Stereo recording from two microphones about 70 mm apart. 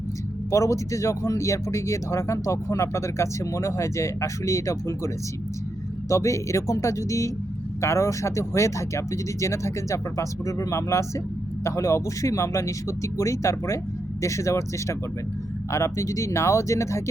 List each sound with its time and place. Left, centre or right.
0.5 s speech: left